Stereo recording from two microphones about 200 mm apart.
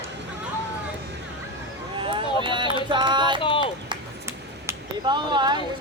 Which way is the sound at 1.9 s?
25° right (ahead or behind).